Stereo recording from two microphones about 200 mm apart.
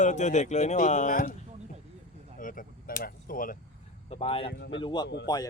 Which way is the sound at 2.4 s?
45° left (ahead or behind).